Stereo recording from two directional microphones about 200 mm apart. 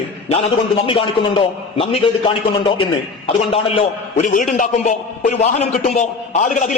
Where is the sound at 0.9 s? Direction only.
25° left (ahead or behind).